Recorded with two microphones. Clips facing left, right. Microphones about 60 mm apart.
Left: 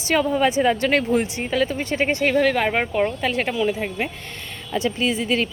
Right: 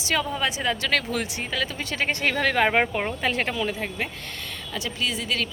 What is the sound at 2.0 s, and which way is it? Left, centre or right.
Speech, centre.